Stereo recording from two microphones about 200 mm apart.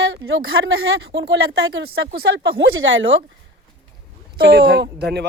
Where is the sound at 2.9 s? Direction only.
70° right (ahead or behind).